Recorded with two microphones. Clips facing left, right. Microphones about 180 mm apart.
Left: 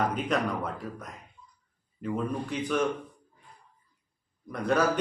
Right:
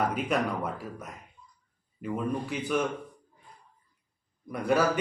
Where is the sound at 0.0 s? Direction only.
5° right (ahead or behind).